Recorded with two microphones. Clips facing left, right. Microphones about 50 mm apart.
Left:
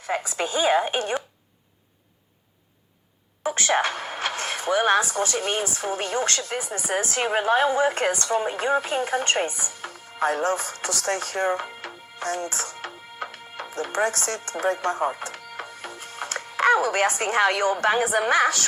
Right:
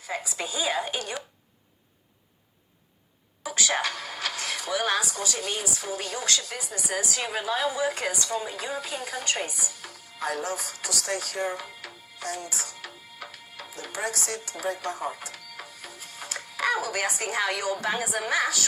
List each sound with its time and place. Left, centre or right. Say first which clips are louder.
0.0 s a woman's voice: left 6 dB; left
3.4 s a woman's voice: left 5 dB; left